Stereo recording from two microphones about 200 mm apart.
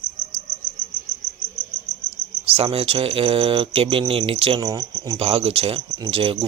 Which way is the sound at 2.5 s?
30° right (ahead or behind).